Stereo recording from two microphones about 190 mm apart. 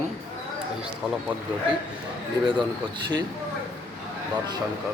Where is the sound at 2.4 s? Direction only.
25° right (ahead or behind).